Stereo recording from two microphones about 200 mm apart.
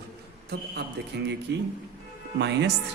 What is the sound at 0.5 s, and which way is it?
A man's voice, 55° right (ahead or behind).